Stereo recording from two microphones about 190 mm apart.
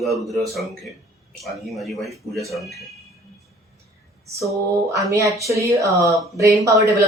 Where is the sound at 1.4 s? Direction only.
Centre (ahead or behind).